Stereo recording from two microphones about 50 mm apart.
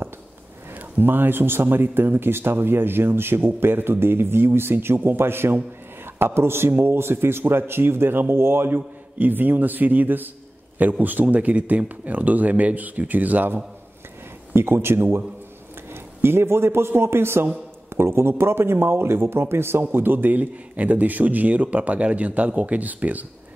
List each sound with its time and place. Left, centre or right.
0.9 s a man's voice: right
14.5 s a man's voice: right
19.8 s a man's voice: right